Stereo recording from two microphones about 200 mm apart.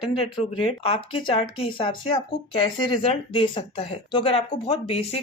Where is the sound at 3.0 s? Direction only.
25° left (ahead or behind).